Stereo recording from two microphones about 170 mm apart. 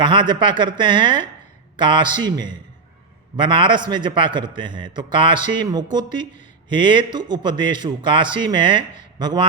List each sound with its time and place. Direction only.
0.0 s a man's voice: 25° right (ahead or behind)